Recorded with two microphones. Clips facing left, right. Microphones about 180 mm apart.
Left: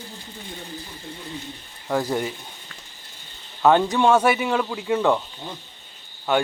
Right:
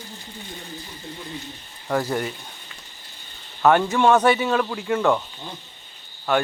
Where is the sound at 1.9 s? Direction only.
10° left (ahead or behind).